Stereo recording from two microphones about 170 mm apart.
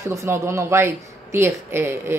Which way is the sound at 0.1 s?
15° right (ahead or behind).